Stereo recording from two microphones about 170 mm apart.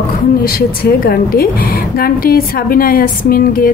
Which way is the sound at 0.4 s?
60° left (ahead or behind).